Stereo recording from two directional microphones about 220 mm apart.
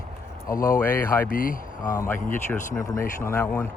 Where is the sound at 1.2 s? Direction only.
40° left (ahead or behind).